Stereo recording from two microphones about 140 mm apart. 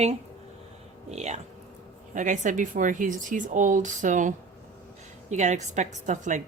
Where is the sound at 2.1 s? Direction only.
65° right (ahead or behind).